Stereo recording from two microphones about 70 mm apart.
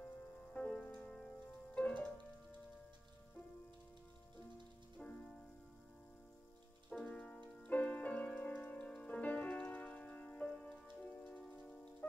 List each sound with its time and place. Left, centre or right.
0.0 s music: left
4.9 s music: centre
7.0 s music: left